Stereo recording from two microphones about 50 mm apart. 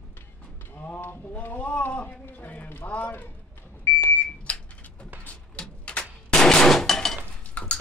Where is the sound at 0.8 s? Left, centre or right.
Left.